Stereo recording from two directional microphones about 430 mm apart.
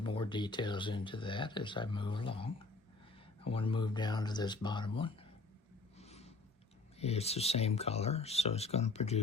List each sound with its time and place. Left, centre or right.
0.0 s speech: centre
6.0 s a sound: centre
7.0 s speech: centre